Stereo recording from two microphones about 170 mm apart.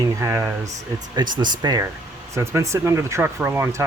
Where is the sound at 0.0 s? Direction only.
15° right (ahead or behind).